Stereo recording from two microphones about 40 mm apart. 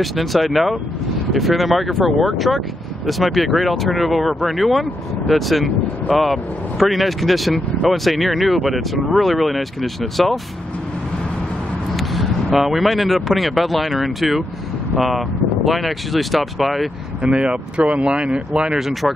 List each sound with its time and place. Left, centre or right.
0.0 s speech: centre
12.2 s speech: centre
17.2 s speech: right
18.8 s speech: centre